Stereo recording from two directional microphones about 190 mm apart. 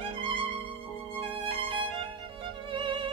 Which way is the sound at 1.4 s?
30° right (ahead or behind).